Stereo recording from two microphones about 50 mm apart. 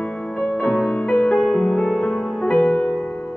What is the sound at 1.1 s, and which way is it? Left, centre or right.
Music, left.